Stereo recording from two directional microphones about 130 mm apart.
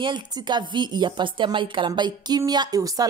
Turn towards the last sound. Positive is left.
turn(degrees=-30)  # may be behind; listen again after turning